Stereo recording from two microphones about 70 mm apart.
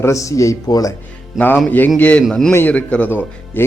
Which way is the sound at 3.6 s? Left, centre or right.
Left.